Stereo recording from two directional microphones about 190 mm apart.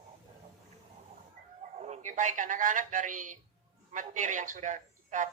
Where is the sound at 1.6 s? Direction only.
35° right (ahead or behind).